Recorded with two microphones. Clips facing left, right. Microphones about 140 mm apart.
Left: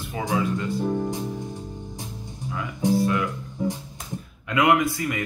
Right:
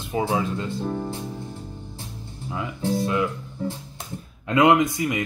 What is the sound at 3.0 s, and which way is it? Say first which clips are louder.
Speech: right 3 dB; 20° right (ahead or behind).